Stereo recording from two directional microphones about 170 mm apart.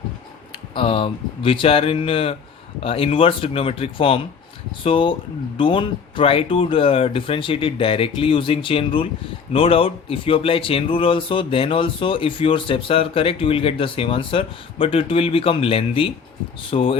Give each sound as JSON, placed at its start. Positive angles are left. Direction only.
{"t": 0.5, "sound": "speech", "side_deg": 30}